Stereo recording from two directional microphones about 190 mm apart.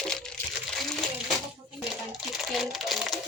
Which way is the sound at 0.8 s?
Centre (ahead or behind).